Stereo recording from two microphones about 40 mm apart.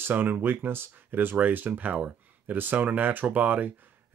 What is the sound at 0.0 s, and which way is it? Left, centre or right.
Speech, right.